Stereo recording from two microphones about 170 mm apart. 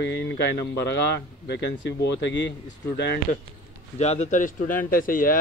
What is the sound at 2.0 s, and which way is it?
Speech, 90° left.